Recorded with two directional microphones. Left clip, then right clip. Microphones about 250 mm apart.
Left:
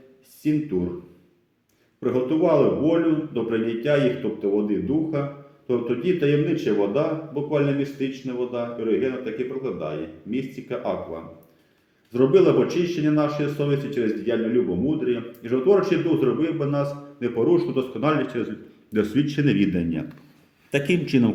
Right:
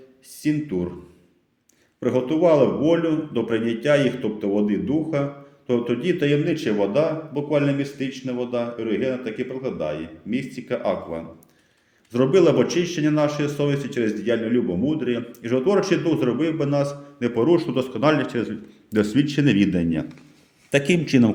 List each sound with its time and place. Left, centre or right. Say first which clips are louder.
0.4 s speech: even; right
2.0 s speech: right 1 dB; right
12.1 s speech: even; right
21.1 s speech: right 3 dB; right